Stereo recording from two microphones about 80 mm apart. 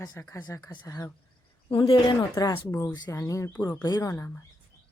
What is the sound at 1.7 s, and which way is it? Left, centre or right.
Speech, left.